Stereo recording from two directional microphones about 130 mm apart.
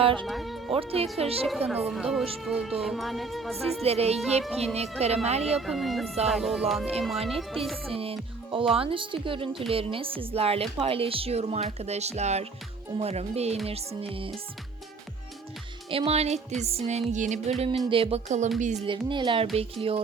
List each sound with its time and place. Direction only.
0.0 s speech: 40° right (ahead or behind)
0.3 s speech: centre (ahead or behind)
0.7 s speech: 45° right (ahead or behind)
1.5 s speech: 10° right (ahead or behind)
3.8 s speech: 50° right (ahead or behind)
5.5 s speech: centre (ahead or behind)
7.9 s music: 45° right (ahead or behind)
8.7 s speech: 45° right (ahead or behind)
15.9 s speech: 50° right (ahead or behind)
16.6 s music: 55° right (ahead or behind)
17.8 s speech: 45° right (ahead or behind)
18.9 s speech: 40° right (ahead or behind)